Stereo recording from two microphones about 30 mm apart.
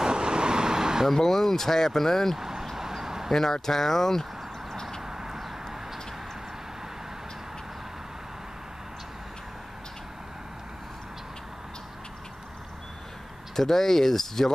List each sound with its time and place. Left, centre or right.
0.0 s vehicle: right
1.1 s speech: centre
2.3 s vehicle: centre
2.7 s a sound: centre
3.3 s speech: centre
5.0 s a sound: centre
13.6 s speech: centre